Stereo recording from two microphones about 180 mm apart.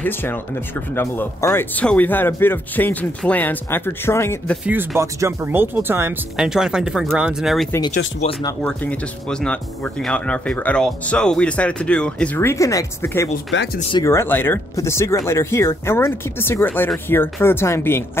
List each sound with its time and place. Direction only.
0.0 s speech: 10° left (ahead or behind)
4.6 s speech: 15° right (ahead or behind)
8.2 s speech: 30° left (ahead or behind)
8.6 s speech: 5° left (ahead or behind)
13.5 s speech: 90° left
13.9 s speech: 15° left (ahead or behind)